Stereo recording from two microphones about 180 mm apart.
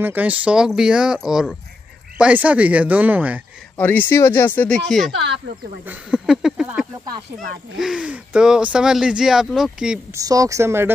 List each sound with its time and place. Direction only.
0.0 s speech: 10° right (ahead or behind)
3.7 s speech: 10° left (ahead or behind)
10.1 s speech: 20° right (ahead or behind)